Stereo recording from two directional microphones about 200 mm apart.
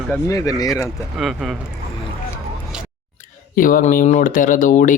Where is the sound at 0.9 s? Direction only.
Centre (ahead or behind).